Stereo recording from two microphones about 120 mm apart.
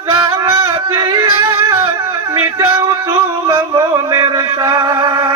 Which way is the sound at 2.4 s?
20° right (ahead or behind).